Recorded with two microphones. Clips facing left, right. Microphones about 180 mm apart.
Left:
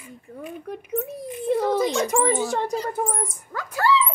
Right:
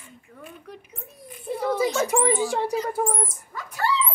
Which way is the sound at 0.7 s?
70° left (ahead or behind).